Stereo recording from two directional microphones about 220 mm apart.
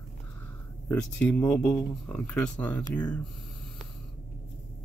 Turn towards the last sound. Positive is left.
turn(degrees=5)  # may be behind; listen again after turning